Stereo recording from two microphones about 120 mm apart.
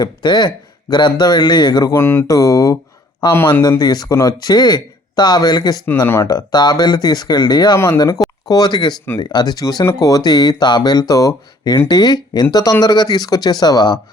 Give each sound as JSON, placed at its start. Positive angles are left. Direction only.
{"t": 0.0, "sound": "speech", "side_deg": 35}
{"t": 3.6, "sound": "speech", "side_deg": 35}
{"t": 6.1, "sound": "speech", "side_deg": 20}
{"t": 6.3, "sound": "speech", "side_deg": 35}